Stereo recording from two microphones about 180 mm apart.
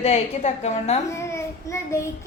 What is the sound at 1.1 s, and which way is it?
Child singing, 15° left (ahead or behind).